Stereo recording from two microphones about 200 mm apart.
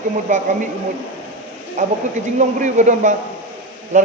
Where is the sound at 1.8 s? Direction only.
40° right (ahead or behind).